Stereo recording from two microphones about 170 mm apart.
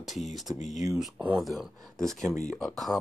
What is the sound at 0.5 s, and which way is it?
Speech, 45° left (ahead or behind).